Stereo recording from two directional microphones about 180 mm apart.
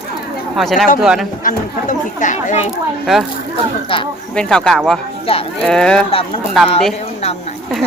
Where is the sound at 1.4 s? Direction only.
45° left (ahead or behind).